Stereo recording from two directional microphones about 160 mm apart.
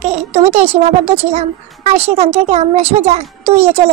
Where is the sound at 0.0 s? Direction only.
40° right (ahead or behind).